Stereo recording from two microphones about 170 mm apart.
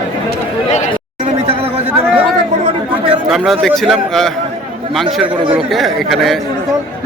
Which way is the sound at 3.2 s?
Centre (ahead or behind).